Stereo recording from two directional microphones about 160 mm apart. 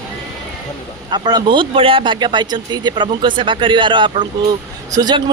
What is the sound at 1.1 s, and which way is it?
Speech, 25° right (ahead or behind).